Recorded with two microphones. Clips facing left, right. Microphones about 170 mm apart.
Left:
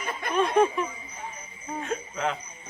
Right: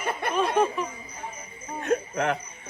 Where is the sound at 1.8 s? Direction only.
65° right (ahead or behind).